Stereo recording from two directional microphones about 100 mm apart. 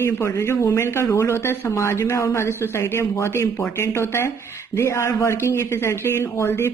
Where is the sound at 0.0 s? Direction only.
30° left (ahead or behind).